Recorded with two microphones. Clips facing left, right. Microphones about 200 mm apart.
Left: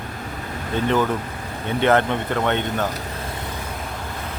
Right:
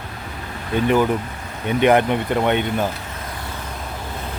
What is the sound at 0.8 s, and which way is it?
Speech, 15° right (ahead or behind).